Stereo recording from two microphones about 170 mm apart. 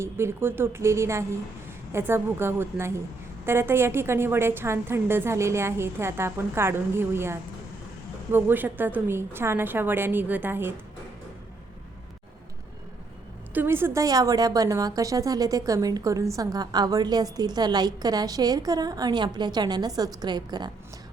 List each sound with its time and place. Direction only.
0.0 s a woman's voice: 15° right (ahead or behind)
13.5 s a woman's voice: 10° right (ahead or behind)